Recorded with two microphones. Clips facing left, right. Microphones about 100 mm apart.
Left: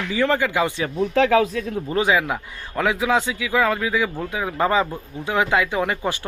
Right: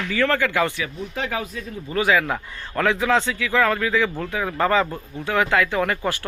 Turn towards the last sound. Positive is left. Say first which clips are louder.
# even
turn(degrees=15)  # may be behind; listen again after turning